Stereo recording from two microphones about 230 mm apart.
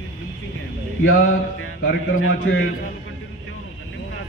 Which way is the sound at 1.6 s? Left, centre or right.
Left.